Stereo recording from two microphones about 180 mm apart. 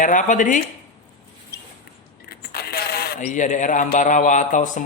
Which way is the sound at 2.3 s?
60° left (ahead or behind).